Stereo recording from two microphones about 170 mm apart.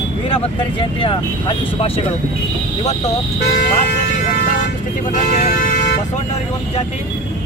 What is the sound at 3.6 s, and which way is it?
Vehicle, 50° left (ahead or behind).